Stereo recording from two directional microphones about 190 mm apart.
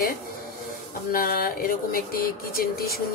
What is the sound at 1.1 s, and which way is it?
A woman's voice, 50° left (ahead or behind).